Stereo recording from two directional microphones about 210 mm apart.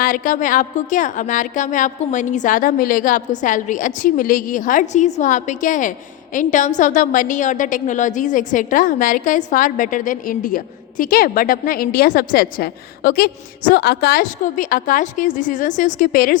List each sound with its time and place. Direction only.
0.0 s a woman's voice: 40° left (ahead or behind)